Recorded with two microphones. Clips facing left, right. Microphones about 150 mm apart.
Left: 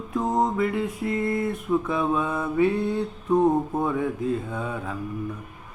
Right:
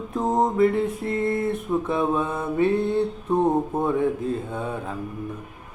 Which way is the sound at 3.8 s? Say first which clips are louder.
Right 3 dB; 25° right (ahead or behind).